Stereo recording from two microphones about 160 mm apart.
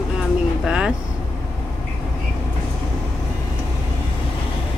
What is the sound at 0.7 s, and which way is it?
Vehicle, 5° right (ahead or behind).